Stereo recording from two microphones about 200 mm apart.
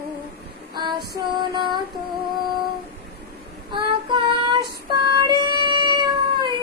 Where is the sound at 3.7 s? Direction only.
25° right (ahead or behind).